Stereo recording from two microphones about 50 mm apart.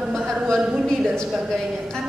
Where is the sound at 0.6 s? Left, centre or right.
Centre.